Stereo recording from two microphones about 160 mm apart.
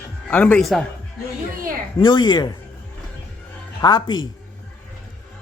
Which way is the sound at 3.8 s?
25° left (ahead or behind).